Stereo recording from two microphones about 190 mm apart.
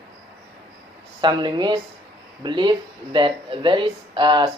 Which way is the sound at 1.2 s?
25° right (ahead or behind).